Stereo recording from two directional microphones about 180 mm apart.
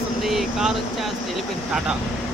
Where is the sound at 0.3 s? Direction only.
Centre (ahead or behind).